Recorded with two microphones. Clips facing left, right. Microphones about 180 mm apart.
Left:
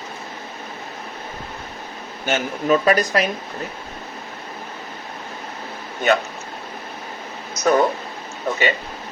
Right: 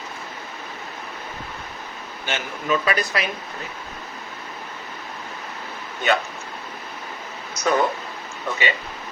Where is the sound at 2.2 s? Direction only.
45° left (ahead or behind).